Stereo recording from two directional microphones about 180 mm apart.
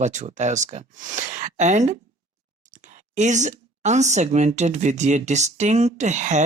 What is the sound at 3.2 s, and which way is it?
Speech, 40° right (ahead or behind).